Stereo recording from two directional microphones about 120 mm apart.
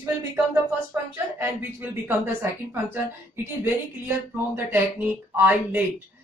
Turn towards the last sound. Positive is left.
turn(degrees=-15)  # may be behind; listen again after turning